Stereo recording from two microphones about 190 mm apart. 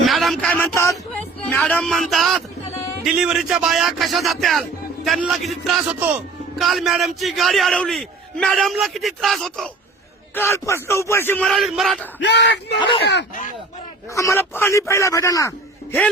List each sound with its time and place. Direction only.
0.0 s a sound: centre (ahead or behind)
1.5 s a man's voice: 10° left (ahead or behind)
10.3 s a man's voice: 15° left (ahead or behind)
11.4 s a man's voice: centre (ahead or behind)
12.2 s speech: 65° left (ahead or behind)
12.8 s speech: 25° left (ahead or behind)
14.1 s a man's voice: 15° left (ahead or behind)